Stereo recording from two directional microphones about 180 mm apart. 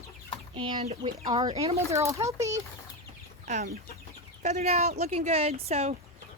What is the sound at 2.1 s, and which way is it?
Speech, 15° right (ahead or behind).